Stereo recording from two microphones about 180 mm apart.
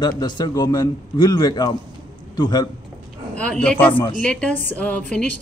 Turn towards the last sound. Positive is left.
turn(degrees=5)  # may be behind; listen again after turning